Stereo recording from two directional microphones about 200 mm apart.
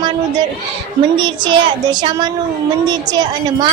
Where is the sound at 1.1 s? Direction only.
25° right (ahead or behind).